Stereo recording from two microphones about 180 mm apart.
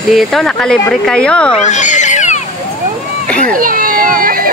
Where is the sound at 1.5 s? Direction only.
40° left (ahead or behind).